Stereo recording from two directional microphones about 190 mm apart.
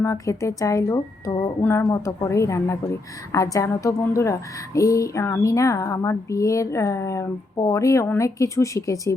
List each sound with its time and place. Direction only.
0.0 s speech: 15° left (ahead or behind)